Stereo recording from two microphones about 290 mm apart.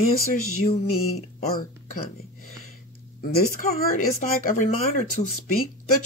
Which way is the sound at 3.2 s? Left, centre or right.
Left.